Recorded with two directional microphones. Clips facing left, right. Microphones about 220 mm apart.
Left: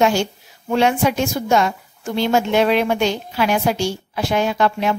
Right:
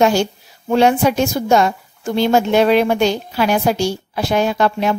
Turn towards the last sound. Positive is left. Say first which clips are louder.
# right 2 dB
turn(degrees=-40)  # may be behind; listen again after turning